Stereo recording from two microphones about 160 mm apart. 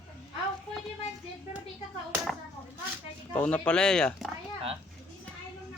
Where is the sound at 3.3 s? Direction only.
10° left (ahead or behind).